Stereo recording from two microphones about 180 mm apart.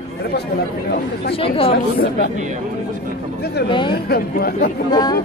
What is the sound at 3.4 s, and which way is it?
Speech, 65° left (ahead or behind).